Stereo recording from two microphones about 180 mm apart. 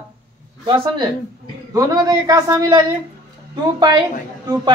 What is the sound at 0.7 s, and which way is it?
A man's voice, 25° right (ahead or behind).